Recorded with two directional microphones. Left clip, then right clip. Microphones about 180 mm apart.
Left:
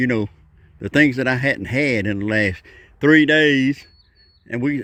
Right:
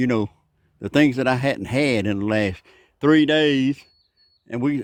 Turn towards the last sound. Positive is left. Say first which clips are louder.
# left 1 dB
turn(degrees=-15)  # may be behind; listen again after turning